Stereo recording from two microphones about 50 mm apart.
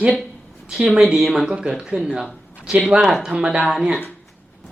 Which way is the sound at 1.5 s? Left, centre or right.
Centre.